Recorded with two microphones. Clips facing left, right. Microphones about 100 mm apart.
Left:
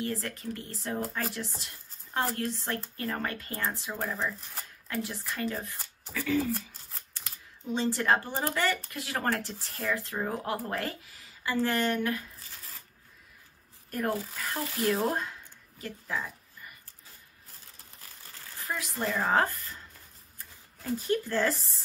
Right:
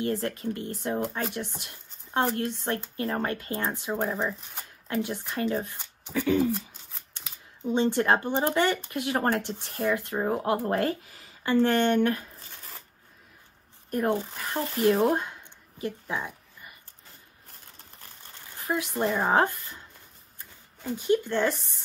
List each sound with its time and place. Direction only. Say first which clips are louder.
0.0 s speech: right 5 dB; 30° right (ahead or behind)
6.5 s shuffling cards: right 2 dB; centre (ahead or behind)
7.6 s speech: right 4 dB; 30° right (ahead or behind)
13.8 s speech: right 5 dB; 30° right (ahead or behind)
18.3 s speech: right 6 dB; 25° right (ahead or behind)
20.8 s speech: right 4 dB; centre (ahead or behind)